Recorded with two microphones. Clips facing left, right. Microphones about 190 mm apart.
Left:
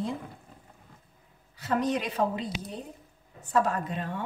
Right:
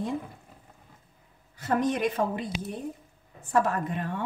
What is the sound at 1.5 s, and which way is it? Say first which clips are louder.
Speech: right 1 dB; 50° right (ahead or behind).